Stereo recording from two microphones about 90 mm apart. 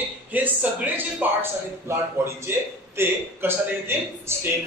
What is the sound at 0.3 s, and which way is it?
A man's voice, 20° right (ahead or behind).